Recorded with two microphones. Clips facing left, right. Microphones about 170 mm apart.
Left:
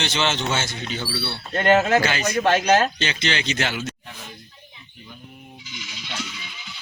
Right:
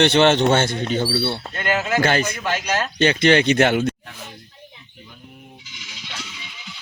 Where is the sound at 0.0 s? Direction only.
60° right (ahead or behind).